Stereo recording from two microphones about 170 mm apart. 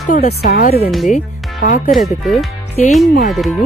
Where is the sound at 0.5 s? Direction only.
65° left (ahead or behind).